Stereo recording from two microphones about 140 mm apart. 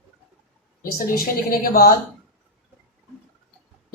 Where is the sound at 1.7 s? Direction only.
90° left.